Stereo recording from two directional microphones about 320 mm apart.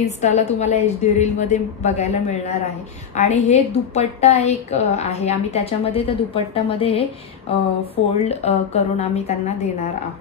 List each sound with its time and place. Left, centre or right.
0.0 s a woman's voice: left
8.2 s a woman's voice: centre